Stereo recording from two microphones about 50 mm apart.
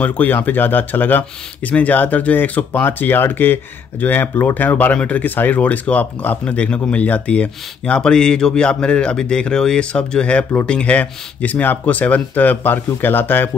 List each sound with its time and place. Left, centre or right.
0.0 s speech: left